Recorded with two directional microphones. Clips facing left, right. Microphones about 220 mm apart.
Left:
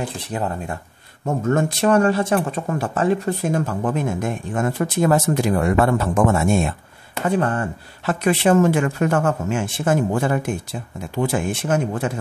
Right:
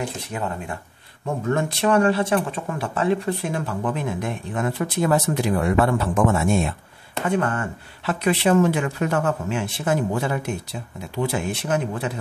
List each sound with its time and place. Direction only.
0.3 s speech: 35° left (ahead or behind)
1.2 s speech: 45° left (ahead or behind)
7.2 s speech: 35° left (ahead or behind)
8.0 s speech: 45° left (ahead or behind)